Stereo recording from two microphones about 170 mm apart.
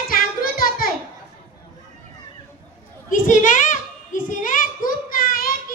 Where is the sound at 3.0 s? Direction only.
50° left (ahead or behind).